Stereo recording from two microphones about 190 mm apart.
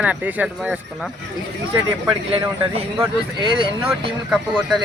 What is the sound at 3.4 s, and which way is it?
Speech, 25° right (ahead or behind).